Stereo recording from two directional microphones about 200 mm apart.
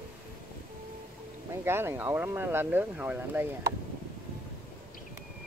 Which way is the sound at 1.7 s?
10° right (ahead or behind).